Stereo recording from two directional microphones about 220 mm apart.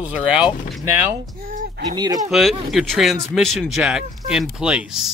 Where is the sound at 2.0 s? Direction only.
15° right (ahead or behind).